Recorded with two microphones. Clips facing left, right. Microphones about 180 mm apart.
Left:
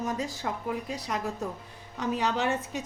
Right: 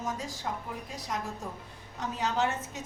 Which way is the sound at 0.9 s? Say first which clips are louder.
Left 4 dB; 65° left (ahead or behind).